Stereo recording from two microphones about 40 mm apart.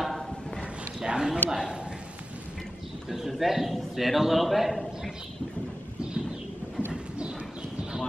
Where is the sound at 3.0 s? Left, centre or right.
Centre.